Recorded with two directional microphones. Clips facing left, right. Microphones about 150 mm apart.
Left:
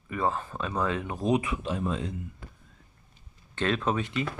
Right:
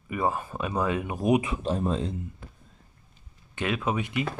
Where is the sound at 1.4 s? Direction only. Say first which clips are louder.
Right 3 dB; 30° right (ahead or behind).